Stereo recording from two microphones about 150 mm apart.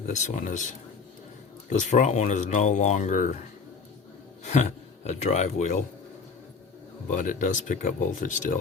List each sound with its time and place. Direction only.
0.1 s speech: 55° left (ahead or behind)
1.9 s speech: 50° left (ahead or behind)
4.4 s speech: 50° left (ahead or behind)
7.1 s speech: 55° left (ahead or behind)